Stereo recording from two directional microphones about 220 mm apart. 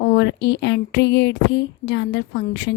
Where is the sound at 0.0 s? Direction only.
50° left (ahead or behind).